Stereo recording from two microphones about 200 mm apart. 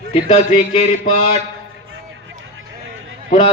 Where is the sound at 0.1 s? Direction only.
35° left (ahead or behind).